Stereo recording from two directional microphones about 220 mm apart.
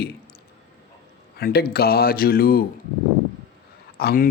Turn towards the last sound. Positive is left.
turn(degrees=45)  # may be behind; listen again after turning